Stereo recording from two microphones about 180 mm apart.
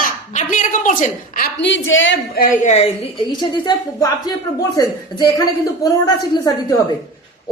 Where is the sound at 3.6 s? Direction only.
25° left (ahead or behind).